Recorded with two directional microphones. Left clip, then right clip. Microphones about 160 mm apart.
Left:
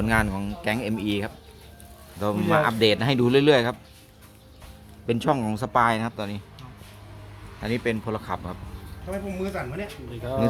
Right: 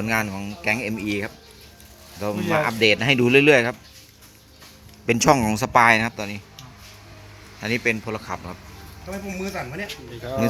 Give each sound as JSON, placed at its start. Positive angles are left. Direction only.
{"t": 0.0, "sound": "speech", "side_deg": 5}
{"t": 5.0, "sound": "a man's voice", "side_deg": -20}
{"t": 7.6, "sound": "a man's voice", "side_deg": -10}
{"t": 9.0, "sound": "speech", "side_deg": -35}